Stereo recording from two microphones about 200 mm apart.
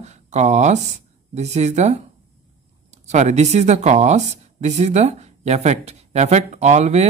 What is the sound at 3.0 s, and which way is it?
Speech, 35° right (ahead or behind).